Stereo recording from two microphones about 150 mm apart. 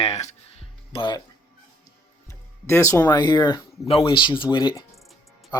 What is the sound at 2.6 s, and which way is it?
Speech, 15° left (ahead or behind).